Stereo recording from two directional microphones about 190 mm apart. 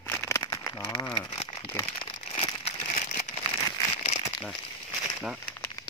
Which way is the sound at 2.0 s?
30° left (ahead or behind).